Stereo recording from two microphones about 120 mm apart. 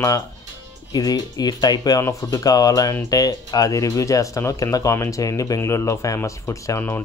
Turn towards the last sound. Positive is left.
turn(degrees=20)  # may be behind; listen again after turning